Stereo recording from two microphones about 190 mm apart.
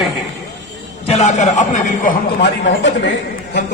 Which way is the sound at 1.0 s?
35° left (ahead or behind).